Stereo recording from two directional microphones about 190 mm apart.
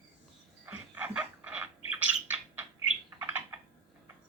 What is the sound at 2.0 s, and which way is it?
Bird, 10° right (ahead or behind).